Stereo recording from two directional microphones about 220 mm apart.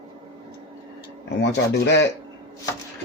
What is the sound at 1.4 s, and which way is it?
Speech, 50° left (ahead or behind).